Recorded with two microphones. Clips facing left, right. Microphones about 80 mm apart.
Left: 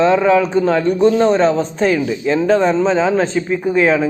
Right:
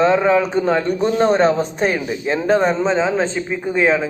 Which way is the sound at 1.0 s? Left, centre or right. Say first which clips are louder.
Left 5 dB; right.